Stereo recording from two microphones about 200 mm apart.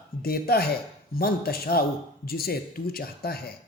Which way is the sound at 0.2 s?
50° left (ahead or behind).